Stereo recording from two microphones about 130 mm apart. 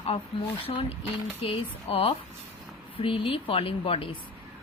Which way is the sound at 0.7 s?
50° left (ahead or behind).